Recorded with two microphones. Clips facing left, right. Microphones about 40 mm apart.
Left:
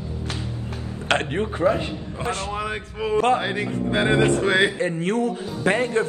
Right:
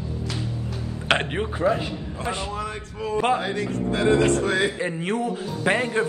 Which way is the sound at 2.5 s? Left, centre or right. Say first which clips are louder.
Left 3 dB; left.